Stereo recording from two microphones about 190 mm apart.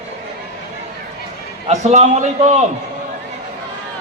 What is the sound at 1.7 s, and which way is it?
Speech, 35° right (ahead or behind).